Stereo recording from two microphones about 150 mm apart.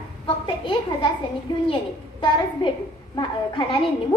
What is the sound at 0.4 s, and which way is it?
A woman's voice, 35° left (ahead or behind).